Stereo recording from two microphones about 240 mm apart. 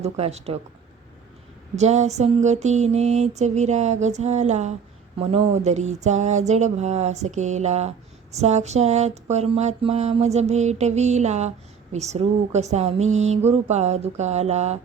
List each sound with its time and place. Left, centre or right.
0.0 s speech: right
1.7 s speech: right